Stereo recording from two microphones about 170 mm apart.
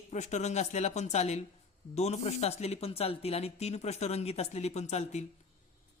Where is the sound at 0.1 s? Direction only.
45° left (ahead or behind).